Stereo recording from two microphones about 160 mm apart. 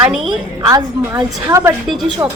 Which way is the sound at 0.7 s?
20° right (ahead or behind).